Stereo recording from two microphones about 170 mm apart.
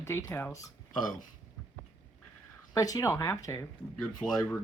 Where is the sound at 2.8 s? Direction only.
20° left (ahead or behind).